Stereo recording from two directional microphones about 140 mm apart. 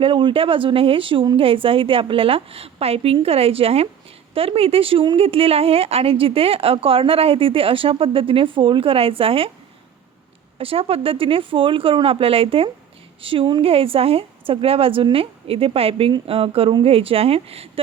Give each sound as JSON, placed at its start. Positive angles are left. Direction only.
{"t": 0.0, "sound": "speech", "side_deg": -35}
{"t": 10.6, "sound": "speech", "side_deg": -40}